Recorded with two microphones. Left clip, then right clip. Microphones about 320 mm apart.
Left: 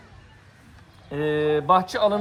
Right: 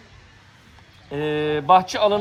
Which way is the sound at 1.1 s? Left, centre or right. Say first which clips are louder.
Even; centre.